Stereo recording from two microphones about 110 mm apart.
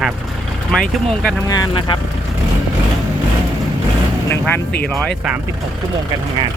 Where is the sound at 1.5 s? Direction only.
40° left (ahead or behind).